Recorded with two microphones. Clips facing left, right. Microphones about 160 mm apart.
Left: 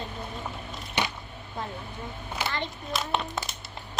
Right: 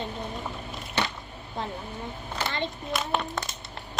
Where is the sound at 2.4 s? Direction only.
20° right (ahead or behind).